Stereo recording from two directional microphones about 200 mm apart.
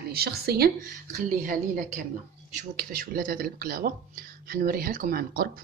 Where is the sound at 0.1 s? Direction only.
50° right (ahead or behind).